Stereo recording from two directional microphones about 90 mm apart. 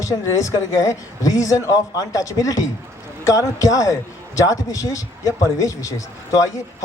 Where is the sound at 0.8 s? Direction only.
40° left (ahead or behind).